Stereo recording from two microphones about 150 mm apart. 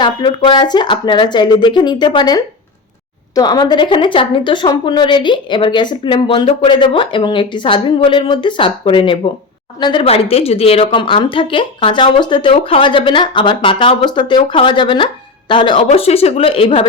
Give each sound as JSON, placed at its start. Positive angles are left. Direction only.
{"t": 0.0, "sound": "speech", "side_deg": 30}